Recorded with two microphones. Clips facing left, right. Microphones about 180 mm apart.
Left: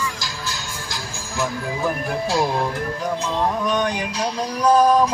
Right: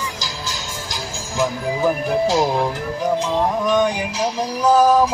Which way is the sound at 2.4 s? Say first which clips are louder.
Right 3 dB; 15° right (ahead or behind).